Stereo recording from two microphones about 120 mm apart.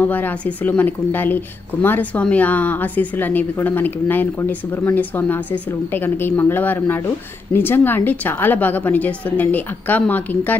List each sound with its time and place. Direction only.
0.0 s speech: 15° left (ahead or behind)